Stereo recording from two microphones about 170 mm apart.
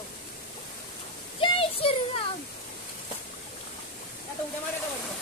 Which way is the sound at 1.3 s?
30° left (ahead or behind).